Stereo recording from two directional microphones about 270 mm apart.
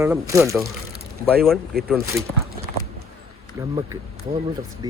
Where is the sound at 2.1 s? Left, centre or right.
Centre.